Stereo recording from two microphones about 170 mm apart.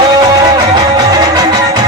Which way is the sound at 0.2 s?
20° right (ahead or behind).